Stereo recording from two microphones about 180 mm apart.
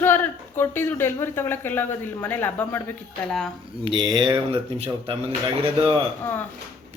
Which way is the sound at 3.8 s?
25° right (ahead or behind).